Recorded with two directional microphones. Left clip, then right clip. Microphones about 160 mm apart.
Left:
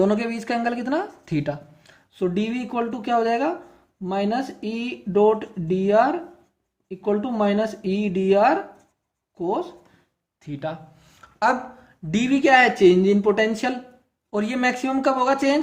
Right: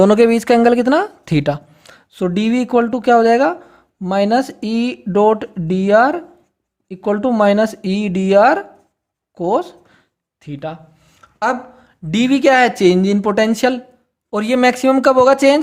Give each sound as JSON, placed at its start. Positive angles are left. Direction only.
{"t": 0.0, "sound": "speech", "side_deg": -90}
{"t": 10.4, "sound": "speech", "side_deg": -40}
{"t": 11.2, "sound": "a sound", "side_deg": -35}
{"t": 12.1, "sound": "speech", "side_deg": -75}
{"t": 14.3, "sound": "speech", "side_deg": -75}